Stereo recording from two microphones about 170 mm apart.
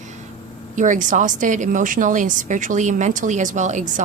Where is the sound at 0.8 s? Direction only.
50° right (ahead or behind).